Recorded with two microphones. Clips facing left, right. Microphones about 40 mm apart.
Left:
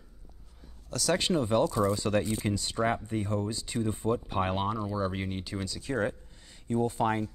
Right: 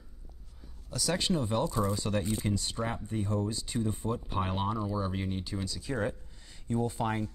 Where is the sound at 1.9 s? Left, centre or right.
Left.